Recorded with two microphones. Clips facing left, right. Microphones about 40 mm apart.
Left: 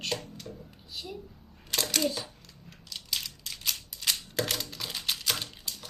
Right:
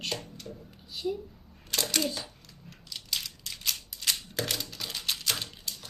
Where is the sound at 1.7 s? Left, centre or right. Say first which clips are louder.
Left 1 dB; centre.